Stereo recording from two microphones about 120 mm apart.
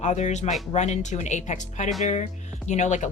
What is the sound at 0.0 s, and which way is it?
Speech, 75° left (ahead or behind).